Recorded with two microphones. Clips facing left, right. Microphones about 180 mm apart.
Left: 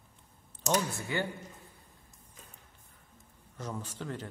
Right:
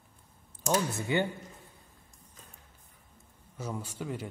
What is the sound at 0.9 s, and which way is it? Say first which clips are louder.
Speech: right 5 dB; 20° right (ahead or behind).